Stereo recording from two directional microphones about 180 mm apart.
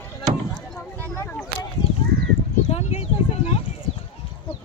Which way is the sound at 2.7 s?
35° left (ahead or behind).